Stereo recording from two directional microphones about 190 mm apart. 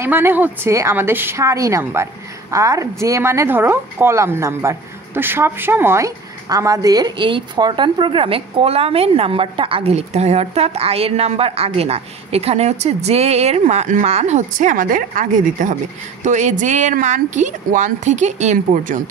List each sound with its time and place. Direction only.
0.0 s a woman's voice: 10° right (ahead or behind); by 18.9 s 40° right (ahead or behind)